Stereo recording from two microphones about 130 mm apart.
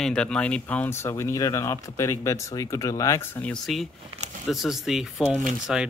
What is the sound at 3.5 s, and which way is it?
Speech, centre (ahead or behind).